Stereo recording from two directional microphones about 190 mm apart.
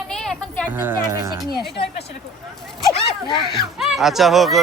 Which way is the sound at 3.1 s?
25° left (ahead or behind).